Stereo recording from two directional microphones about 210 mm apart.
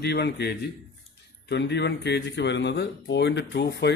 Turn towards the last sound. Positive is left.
turn(degrees=55)  # may be behind; listen again after turning